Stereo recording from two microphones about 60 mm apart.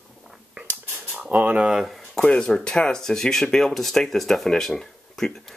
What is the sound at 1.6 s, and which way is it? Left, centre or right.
Speech, centre.